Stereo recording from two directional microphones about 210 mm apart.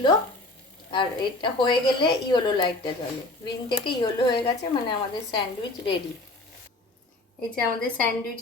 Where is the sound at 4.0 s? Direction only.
25° left (ahead or behind).